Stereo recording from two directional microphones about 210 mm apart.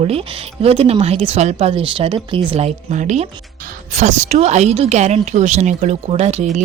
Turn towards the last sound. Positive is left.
turn(degrees=-30)  # may be behind; listen again after turning